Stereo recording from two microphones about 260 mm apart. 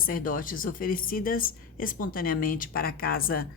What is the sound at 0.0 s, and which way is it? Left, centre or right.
A woman's voice, left.